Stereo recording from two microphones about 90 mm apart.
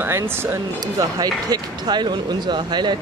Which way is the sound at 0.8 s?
45° right (ahead or behind).